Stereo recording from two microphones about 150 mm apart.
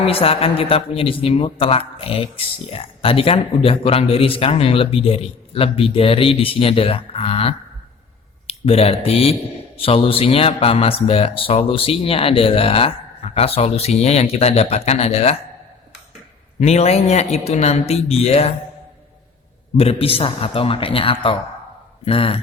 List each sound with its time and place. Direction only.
0.0 s speech: 40° left (ahead or behind)
16.6 s speech: 45° left (ahead or behind)
19.7 s speech: 40° left (ahead or behind)